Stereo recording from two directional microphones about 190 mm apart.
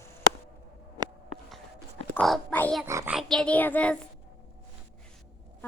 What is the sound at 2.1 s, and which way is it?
Speech, centre (ahead or behind).